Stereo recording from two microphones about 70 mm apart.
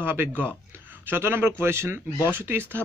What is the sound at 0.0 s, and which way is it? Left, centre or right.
Speech, right.